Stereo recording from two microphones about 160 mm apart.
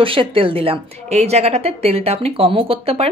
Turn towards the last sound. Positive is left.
turn(degrees=-35)  # may be behind; listen again after turning